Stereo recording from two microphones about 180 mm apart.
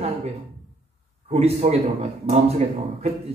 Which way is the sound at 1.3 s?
35° right (ahead or behind).